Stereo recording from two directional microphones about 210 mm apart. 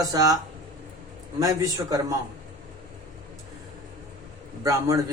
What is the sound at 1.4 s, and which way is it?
Speech, 15° right (ahead or behind).